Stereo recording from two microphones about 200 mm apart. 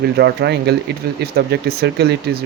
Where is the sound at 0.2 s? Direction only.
55° right (ahead or behind).